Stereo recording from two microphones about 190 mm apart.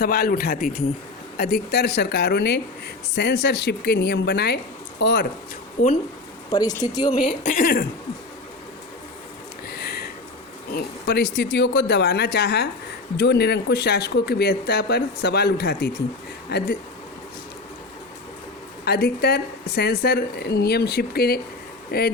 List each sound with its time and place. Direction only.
0.0 s speech: 55° left (ahead or behind)
5.8 s speech: 45° left (ahead or behind)
6.5 s speech: 20° left (ahead or behind)
7.4 s speech: 45° left (ahead or behind)
9.6 s a sound: 60° left (ahead or behind)
10.7 s speech: 55° left (ahead or behind)
18.9 s speech: 55° left (ahead or behind)